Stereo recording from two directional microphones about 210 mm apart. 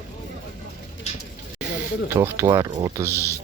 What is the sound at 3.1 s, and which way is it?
Speech, 10° left (ahead or behind).